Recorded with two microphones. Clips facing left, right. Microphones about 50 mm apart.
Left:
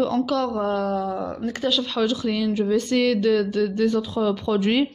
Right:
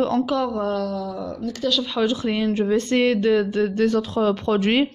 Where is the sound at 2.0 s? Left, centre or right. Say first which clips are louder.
Right 1 dB; right.